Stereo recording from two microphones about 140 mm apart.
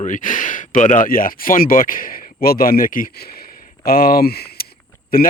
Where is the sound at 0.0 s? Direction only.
65° left (ahead or behind).